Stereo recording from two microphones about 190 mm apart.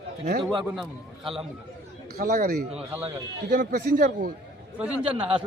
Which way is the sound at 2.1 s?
45° right (ahead or behind).